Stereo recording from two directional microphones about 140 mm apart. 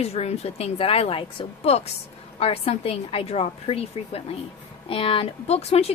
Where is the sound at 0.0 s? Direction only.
50° left (ahead or behind).